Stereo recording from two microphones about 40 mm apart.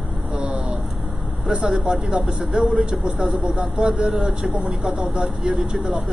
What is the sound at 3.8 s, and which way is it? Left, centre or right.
Speech, right.